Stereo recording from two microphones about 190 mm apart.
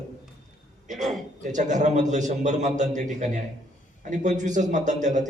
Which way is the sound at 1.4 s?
40° right (ahead or behind).